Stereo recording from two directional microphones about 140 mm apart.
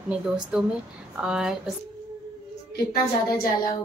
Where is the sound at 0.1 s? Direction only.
5° right (ahead or behind).